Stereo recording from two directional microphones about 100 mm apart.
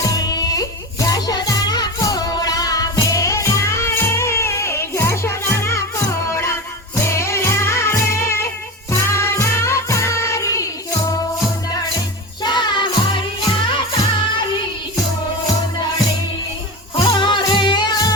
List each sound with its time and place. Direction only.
0.0 s music: 40° left (ahead or behind)
11.7 s music: 45° left (ahead or behind)
17.0 s music: 50° left (ahead or behind)